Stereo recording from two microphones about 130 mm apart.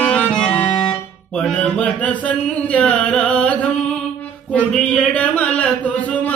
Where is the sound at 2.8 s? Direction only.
10° left (ahead or behind).